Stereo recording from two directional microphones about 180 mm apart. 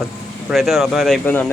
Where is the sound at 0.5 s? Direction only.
Centre (ahead or behind).